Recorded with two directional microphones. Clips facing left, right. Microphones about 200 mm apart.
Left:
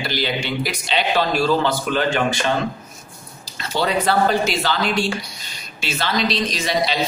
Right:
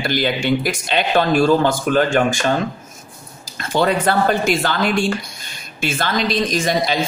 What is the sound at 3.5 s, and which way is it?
A man's voice, 50° right (ahead or behind).